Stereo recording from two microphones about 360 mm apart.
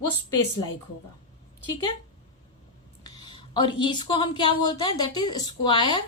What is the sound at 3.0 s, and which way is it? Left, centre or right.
Speech, centre.